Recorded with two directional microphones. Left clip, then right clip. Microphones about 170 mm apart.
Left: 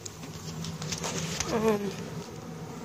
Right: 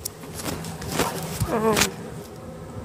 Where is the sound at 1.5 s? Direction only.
10° right (ahead or behind).